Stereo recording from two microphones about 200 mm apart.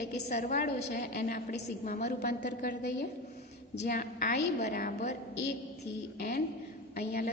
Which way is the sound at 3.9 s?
45° left (ahead or behind).